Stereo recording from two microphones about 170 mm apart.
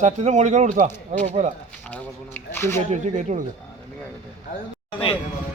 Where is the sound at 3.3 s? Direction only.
45° right (ahead or behind).